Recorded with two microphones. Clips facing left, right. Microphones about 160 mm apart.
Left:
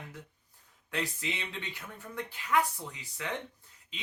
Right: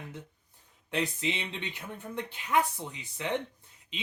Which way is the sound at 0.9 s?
20° right (ahead or behind).